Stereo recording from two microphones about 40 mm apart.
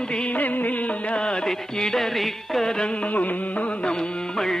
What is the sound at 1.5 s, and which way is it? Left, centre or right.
Music, centre.